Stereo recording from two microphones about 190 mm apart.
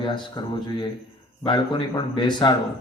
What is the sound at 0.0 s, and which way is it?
A man's voice, 25° left (ahead or behind).